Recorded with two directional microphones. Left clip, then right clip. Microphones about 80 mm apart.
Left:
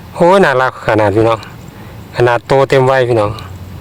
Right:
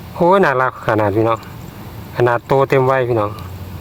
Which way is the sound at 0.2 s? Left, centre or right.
Left.